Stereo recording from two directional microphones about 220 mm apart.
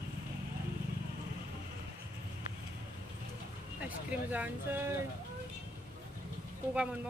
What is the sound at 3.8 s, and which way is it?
Speech, 5° right (ahead or behind).